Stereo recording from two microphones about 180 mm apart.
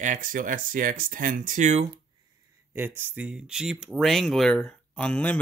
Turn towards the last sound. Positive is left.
turn(degrees=5)  # may be behind; listen again after turning